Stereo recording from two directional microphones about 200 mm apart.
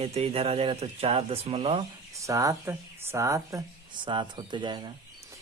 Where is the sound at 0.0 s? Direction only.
30° right (ahead or behind).